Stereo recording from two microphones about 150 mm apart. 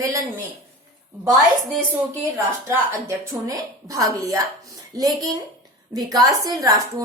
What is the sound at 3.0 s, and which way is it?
A woman's voice, 20° right (ahead or behind).